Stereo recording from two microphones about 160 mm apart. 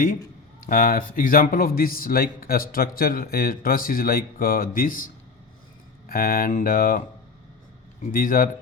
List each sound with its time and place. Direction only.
0.6 s speech: 60° left (ahead or behind)
8.1 s speech: 60° left (ahead or behind)